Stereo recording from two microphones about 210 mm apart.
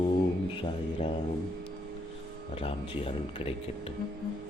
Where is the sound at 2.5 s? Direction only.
25° left (ahead or behind).